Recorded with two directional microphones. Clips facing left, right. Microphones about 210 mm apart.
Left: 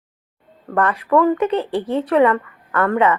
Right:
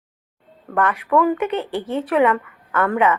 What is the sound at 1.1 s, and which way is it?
A woman's voice, 10° right (ahead or behind).